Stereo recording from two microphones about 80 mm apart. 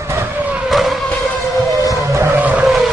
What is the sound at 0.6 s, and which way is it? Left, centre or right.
Vehicle, centre.